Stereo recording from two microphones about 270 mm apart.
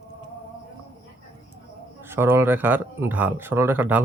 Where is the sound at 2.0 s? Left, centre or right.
Centre.